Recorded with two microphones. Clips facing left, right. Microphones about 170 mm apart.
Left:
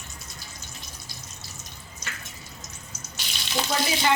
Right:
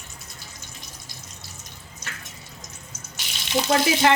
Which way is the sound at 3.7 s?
60° right (ahead or behind).